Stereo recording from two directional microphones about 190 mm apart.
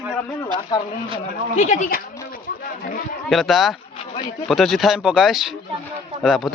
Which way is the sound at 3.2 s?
Centre (ahead or behind).